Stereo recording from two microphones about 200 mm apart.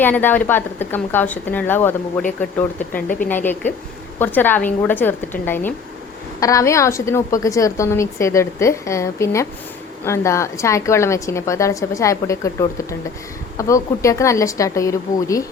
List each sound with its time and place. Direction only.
0.0 s a woman's voice: 10° left (ahead or behind)